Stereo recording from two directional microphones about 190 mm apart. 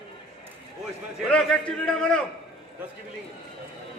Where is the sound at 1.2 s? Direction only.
5° left (ahead or behind).